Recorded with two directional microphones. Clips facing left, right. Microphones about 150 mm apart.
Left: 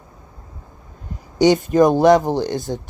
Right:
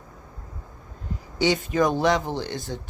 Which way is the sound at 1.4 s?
45° left (ahead or behind).